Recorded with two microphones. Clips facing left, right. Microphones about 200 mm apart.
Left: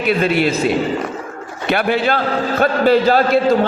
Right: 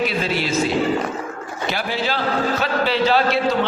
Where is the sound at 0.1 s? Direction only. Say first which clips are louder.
Left 8 dB; 60° left (ahead or behind).